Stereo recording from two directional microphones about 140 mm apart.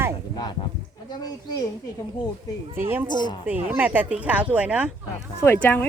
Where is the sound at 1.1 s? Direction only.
25° left (ahead or behind).